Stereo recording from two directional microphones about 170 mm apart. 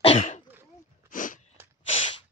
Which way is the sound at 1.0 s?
50° left (ahead or behind).